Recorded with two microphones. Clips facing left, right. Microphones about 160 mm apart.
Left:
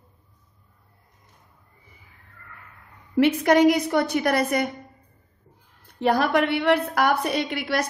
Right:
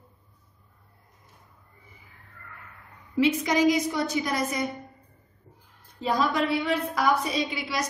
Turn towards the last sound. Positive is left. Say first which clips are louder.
# left 4 dB
turn(degrees=60)  # may be behind; listen again after turning